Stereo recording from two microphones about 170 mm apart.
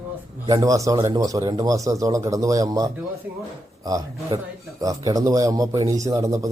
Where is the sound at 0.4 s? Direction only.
20° right (ahead or behind).